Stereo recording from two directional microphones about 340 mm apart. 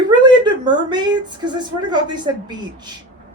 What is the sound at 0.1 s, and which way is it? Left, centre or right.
Speech, centre.